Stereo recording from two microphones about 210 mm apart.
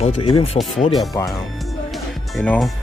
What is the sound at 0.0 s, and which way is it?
Speech, 25° left (ahead or behind).